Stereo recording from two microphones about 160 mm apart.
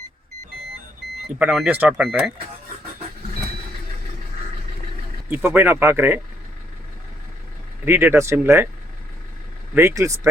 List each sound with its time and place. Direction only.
1.4 s speech: 5° right (ahead or behind)
5.3 s speech: 10° right (ahead or behind)
7.9 s speech: 15° right (ahead or behind)
9.7 s speech: 15° right (ahead or behind)